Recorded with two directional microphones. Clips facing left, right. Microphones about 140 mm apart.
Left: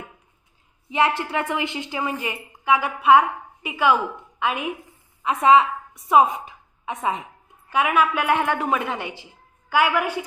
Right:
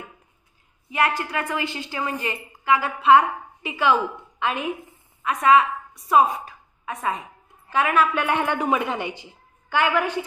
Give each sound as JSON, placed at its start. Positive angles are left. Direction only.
{"t": 0.8, "sound": "a woman's voice", "side_deg": 25}
{"t": 5.2, "sound": "a woman's voice", "side_deg": 25}
{"t": 7.7, "sound": "a woman's voice", "side_deg": 10}